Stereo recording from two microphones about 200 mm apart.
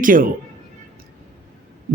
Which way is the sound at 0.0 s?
45° right (ahead or behind).